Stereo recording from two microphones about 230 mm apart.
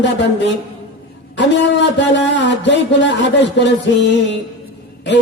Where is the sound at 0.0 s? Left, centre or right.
Left.